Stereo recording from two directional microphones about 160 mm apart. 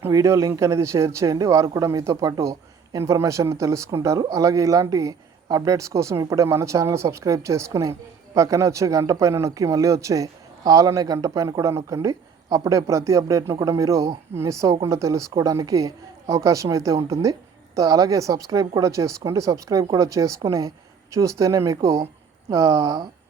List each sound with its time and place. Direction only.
0.0 s speech: 20° right (ahead or behind)